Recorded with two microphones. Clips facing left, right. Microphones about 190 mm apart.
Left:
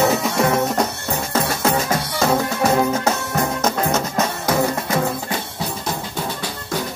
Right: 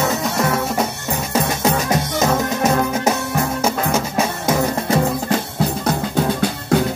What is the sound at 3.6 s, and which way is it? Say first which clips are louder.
Music: right 1 dB; 10° right (ahead or behind).